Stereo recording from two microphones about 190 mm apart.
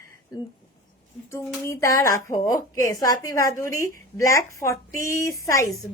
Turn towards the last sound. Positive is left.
turn(degrees=15)  # may be behind; listen again after turning